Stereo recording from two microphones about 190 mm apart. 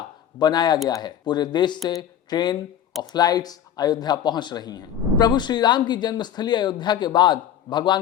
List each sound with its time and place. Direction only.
0.3 s speech: 20° left (ahead or behind)